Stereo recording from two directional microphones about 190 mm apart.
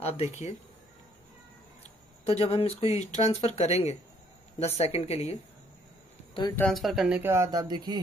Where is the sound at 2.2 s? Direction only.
30° left (ahead or behind).